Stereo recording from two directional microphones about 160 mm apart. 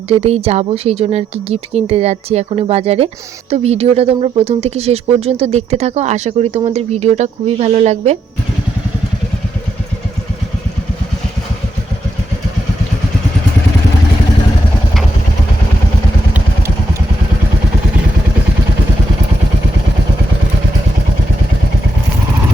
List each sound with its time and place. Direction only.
0.1 s speech: 40° right (ahead or behind)